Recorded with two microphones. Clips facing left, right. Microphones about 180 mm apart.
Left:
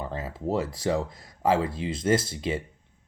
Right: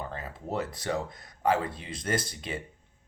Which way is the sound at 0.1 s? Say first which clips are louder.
Left 6 dB; 30° left (ahead or behind).